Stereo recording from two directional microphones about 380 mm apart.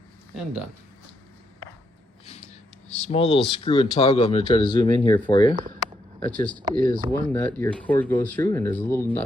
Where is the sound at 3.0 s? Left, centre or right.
Centre.